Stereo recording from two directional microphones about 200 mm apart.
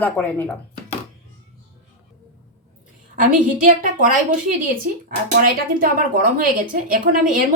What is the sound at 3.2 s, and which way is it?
A woman's voice, 40° right (ahead or behind).